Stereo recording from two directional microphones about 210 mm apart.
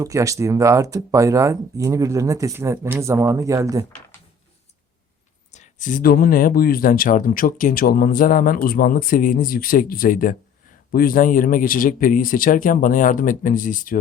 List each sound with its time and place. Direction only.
0.0 s speech: 15° right (ahead or behind)
5.5 s speech: 35° left (ahead or behind)